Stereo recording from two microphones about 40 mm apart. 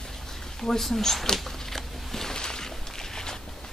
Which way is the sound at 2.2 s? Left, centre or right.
Centre.